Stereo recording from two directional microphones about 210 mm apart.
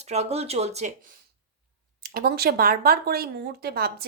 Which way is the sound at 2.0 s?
45° right (ahead or behind).